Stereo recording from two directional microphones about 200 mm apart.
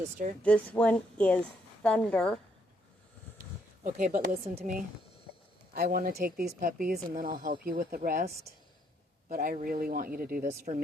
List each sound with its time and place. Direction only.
0.4 s a woman's voice: 5° left (ahead or behind)
3.8 s speech: 40° right (ahead or behind)
9.3 s speech: 45° right (ahead or behind)